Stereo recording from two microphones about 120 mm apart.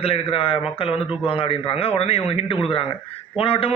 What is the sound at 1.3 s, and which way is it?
A man's voice, 50° left (ahead or behind).